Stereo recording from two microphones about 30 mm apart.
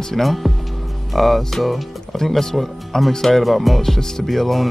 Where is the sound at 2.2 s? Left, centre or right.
Centre.